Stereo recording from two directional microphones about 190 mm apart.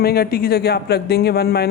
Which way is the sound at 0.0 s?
55° left (ahead or behind).